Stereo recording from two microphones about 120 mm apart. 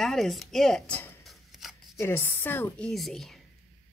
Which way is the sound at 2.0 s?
20° left (ahead or behind).